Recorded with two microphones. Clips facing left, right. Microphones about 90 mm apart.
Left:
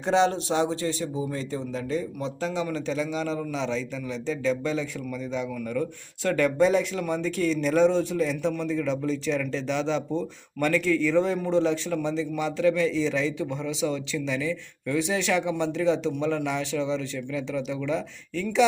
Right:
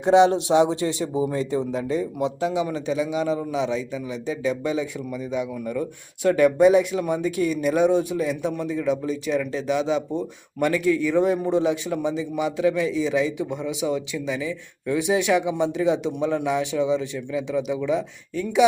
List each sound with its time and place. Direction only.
0.0 s a man's voice: 15° right (ahead or behind)